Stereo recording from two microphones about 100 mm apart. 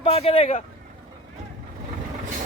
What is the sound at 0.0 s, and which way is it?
Speech, 80° left.